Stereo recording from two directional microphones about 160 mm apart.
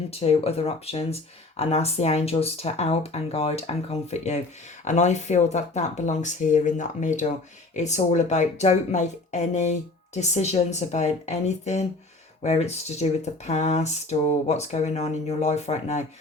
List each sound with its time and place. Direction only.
0.1 s speech: 40° left (ahead or behind)